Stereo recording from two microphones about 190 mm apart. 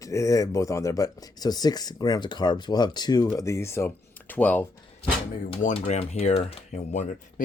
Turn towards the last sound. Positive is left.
turn(degrees=40)  # may be behind; listen again after turning